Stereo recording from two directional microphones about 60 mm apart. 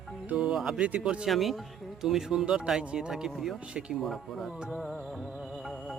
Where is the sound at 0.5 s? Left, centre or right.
Centre.